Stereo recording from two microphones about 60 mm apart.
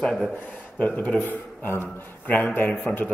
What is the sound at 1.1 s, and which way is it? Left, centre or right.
A man's voice, left.